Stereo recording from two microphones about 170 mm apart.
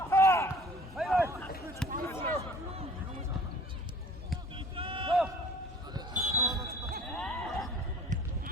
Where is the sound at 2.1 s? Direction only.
15° left (ahead or behind).